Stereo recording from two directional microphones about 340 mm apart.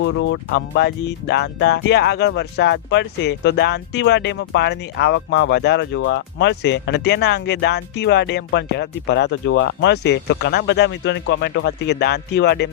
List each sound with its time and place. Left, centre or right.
0.0 s speech: left